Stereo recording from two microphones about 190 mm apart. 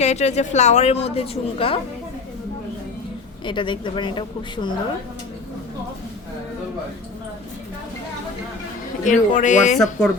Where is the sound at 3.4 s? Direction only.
25° left (ahead or behind).